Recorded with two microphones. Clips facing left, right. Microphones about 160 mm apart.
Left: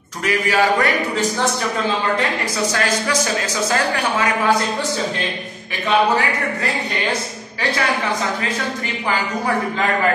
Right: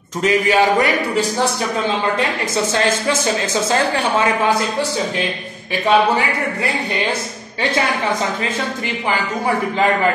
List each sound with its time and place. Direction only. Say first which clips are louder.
0.2 s a man's voice: right 3 dB; 20° right (ahead or behind)
2.5 s a man's voice: right 3 dB; 25° right (ahead or behind)